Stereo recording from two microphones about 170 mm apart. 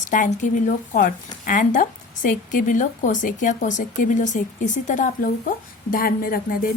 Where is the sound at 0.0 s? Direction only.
50° left (ahead or behind).